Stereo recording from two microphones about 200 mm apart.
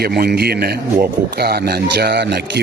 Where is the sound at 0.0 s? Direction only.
50° right (ahead or behind).